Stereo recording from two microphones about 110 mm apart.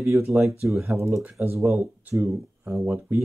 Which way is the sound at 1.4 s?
15° right (ahead or behind).